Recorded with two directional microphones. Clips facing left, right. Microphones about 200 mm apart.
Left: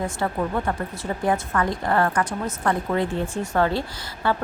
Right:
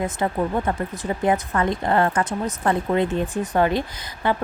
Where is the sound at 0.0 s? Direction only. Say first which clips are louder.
Right 2 dB; 20° right (ahead or behind).